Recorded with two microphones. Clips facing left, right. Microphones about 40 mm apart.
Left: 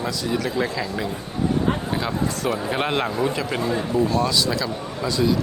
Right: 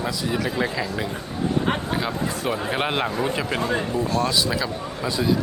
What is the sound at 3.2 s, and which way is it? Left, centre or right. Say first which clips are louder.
Speech: left 1 dB; centre.